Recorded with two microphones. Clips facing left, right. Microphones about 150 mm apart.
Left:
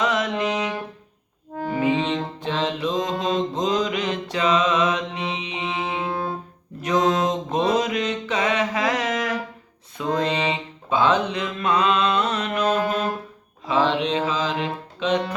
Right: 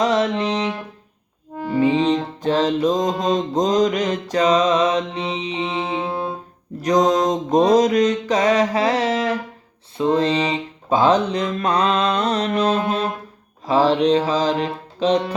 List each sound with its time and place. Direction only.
0.0 s music: 35° right (ahead or behind)
1.8 s music: 35° right (ahead or behind)
7.3 s mantra: 40° right (ahead or behind)
13.7 s music: 40° right (ahead or behind)